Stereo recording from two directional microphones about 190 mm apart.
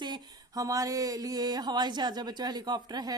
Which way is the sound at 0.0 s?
20° right (ahead or behind).